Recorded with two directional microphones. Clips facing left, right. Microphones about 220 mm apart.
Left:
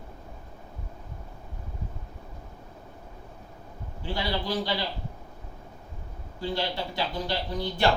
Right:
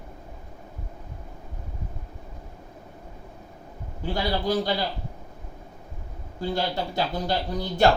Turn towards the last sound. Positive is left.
turn(degrees=-45)  # may be behind; listen again after turning